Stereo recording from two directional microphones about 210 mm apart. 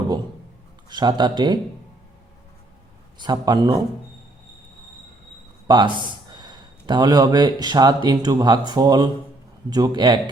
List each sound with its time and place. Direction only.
0.9 s a man's voice: 20° right (ahead or behind)
3.2 s a man's voice: 20° right (ahead or behind)
5.6 s a man's voice: 20° right (ahead or behind)